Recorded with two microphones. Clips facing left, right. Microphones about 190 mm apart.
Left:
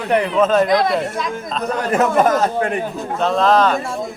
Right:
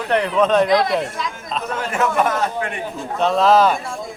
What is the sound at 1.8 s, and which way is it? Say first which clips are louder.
A man's voice: left 4 dB; 40° left (ahead or behind).